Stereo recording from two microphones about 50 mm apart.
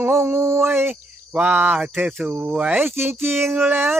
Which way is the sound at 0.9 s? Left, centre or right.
Right.